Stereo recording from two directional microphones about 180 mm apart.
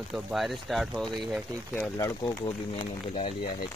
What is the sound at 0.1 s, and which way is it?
Speech, centre (ahead or behind).